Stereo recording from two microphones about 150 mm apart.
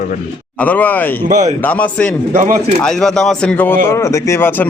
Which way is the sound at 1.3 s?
55° right (ahead or behind).